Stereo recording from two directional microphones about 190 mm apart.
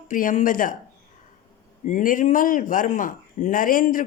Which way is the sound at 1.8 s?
45° left (ahead or behind).